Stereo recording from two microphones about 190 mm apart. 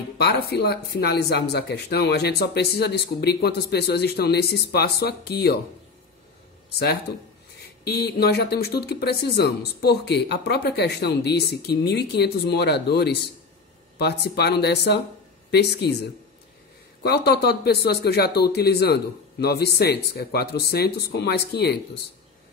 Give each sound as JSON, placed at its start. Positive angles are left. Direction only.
{"t": 0.2, "sound": "speech", "side_deg": 55}
{"t": 6.8, "sound": "speech", "side_deg": 55}
{"t": 17.0, "sound": "speech", "side_deg": 55}